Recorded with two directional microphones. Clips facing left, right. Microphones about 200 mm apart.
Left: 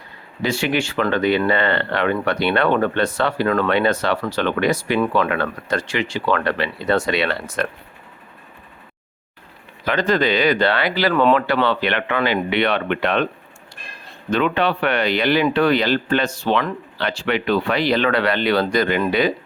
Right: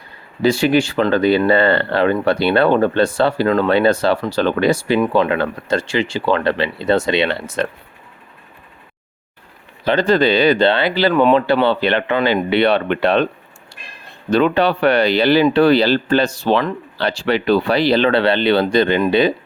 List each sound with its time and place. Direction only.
0.4 s speech: 35° right (ahead or behind)
9.8 s speech: 30° right (ahead or behind)
11.1 s speech: 15° right (ahead or behind)
11.3 s speech: 30° right (ahead or behind)
14.3 s speech: 35° right (ahead or behind)